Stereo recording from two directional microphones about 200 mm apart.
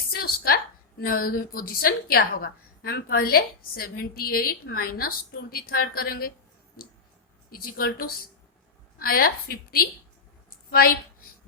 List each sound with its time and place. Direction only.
0.1 s a woman's voice: 50° left (ahead or behind)
7.5 s a woman's voice: 50° left (ahead or behind)